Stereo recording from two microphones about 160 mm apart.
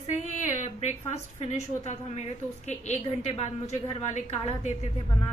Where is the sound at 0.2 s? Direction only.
45° left (ahead or behind).